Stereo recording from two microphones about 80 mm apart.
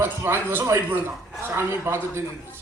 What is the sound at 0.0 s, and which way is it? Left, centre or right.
A man's voice, right.